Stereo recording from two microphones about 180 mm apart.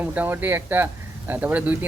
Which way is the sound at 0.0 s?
10° right (ahead or behind).